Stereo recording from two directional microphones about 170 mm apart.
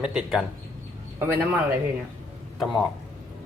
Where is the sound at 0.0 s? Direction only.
5° right (ahead or behind).